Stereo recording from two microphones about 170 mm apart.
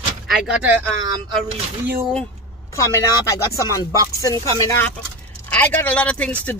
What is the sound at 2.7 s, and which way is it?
Speech, 20° left (ahead or behind).